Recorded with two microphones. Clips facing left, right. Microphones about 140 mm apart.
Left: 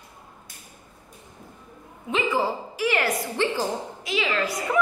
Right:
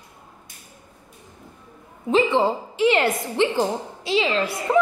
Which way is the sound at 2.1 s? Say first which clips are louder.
Right 6 dB; 25° right (ahead or behind).